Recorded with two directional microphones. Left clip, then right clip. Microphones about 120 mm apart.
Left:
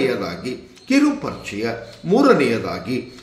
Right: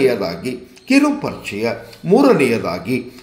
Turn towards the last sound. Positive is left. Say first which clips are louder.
# right 4 dB
turn(degrees=-40)  # may be behind; listen again after turning